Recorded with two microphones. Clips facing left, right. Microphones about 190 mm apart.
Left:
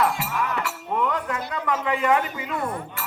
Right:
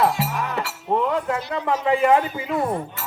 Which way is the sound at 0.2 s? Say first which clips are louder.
Right 2 dB; 25° right (ahead or behind).